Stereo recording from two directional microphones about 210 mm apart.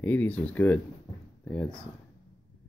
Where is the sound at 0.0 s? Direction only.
10° left (ahead or behind).